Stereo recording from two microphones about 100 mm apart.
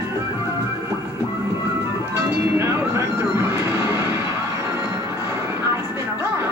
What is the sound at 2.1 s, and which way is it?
Music, 25° right (ahead or behind).